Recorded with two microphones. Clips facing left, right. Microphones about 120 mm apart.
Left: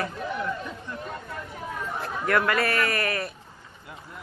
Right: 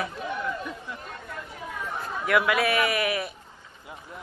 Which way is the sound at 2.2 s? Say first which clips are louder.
Right 1 dB; 5° right (ahead or behind).